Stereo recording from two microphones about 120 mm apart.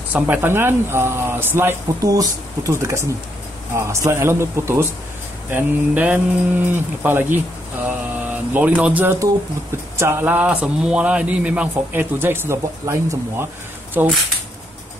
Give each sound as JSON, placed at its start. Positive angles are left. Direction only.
{"t": 0.1, "sound": "speech", "side_deg": -15}
{"t": 2.0, "sound": "speech", "side_deg": -30}